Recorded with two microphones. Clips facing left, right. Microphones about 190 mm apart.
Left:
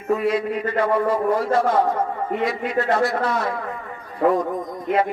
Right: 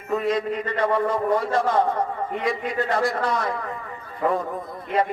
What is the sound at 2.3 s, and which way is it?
A man's voice, centre (ahead or behind).